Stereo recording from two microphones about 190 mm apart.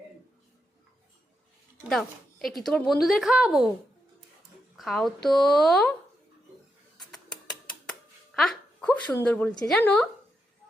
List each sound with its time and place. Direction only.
1.9 s a woman's voice: centre (ahead or behind)
4.8 s speech: centre (ahead or behind)
7.1 s a sound: 5° left (ahead or behind)